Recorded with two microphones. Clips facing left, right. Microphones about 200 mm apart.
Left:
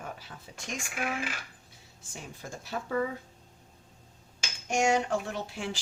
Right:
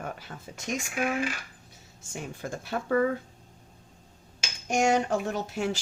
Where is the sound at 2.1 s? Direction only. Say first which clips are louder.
Right 7 dB; 60° right (ahead or behind).